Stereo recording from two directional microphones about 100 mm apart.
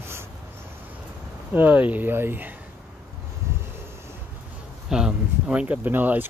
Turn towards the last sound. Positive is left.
turn(degrees=-20)  # may be behind; listen again after turning